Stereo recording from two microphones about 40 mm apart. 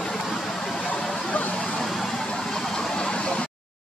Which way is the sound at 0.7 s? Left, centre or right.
Left.